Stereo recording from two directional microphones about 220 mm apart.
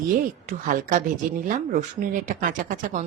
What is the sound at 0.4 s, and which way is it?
Speech, 35° right (ahead or behind).